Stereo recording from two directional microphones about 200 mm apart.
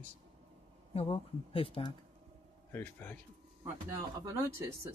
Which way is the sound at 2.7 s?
10° left (ahead or behind).